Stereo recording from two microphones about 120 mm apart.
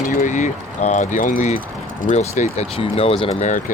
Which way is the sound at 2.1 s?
65° left (ahead or behind).